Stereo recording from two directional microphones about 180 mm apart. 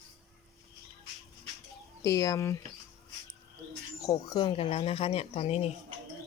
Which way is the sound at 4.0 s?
20° left (ahead or behind).